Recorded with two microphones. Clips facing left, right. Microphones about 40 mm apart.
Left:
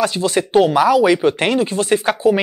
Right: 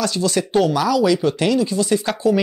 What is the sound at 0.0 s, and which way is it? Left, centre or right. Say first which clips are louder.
Speech: left 3 dB; left.